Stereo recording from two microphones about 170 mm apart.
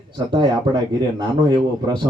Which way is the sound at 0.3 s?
25° right (ahead or behind).